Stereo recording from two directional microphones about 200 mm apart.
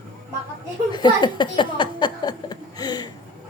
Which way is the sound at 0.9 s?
20° left (ahead or behind).